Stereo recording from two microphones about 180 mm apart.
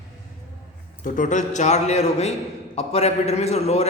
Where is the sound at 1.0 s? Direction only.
45° left (ahead or behind).